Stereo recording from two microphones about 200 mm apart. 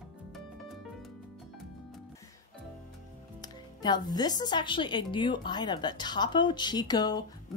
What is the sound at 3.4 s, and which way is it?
Speech, 20° left (ahead or behind).